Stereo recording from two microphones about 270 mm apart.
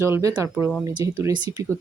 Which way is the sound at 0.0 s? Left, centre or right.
Centre.